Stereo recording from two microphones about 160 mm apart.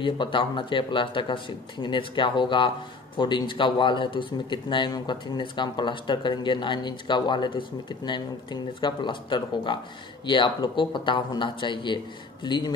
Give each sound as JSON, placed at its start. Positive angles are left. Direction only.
{"t": 0.0, "sound": "speech", "side_deg": 30}